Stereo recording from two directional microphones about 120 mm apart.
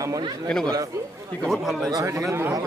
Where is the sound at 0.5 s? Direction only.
5° left (ahead or behind).